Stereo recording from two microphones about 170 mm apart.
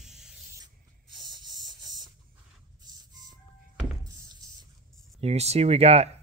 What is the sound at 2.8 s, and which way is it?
Vehicle, 25° right (ahead or behind).